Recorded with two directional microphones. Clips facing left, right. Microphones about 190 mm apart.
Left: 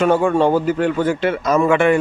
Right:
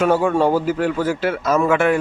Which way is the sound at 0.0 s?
5° right (ahead or behind).